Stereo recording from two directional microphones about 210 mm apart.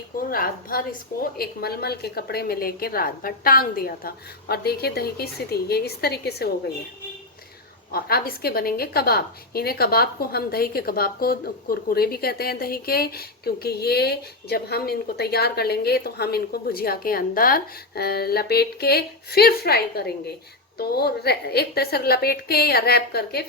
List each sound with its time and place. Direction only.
0.2 s a woman's voice: 45° left (ahead or behind)
7.9 s a woman's voice: 45° left (ahead or behind)